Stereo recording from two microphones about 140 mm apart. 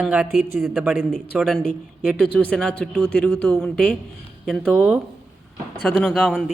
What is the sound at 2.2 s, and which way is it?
Speech, 10° left (ahead or behind).